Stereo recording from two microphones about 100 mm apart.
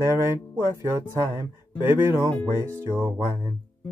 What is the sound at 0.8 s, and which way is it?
Speech, 25° right (ahead or behind).